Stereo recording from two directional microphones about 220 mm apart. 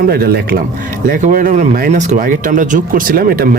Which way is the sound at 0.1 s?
45° right (ahead or behind).